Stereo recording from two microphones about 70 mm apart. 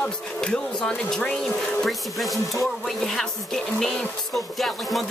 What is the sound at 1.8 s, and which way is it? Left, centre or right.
Speech, centre.